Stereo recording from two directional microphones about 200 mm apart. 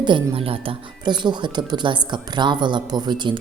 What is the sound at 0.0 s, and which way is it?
Speech, 25° right (ahead or behind).